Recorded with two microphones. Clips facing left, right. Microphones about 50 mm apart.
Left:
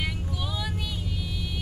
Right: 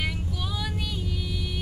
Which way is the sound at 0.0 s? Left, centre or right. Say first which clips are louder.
Right 1 dB; centre.